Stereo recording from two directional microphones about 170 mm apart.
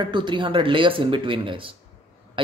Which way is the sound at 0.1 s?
30° right (ahead or behind).